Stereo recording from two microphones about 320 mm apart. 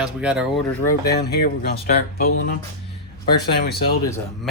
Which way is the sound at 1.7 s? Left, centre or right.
Left.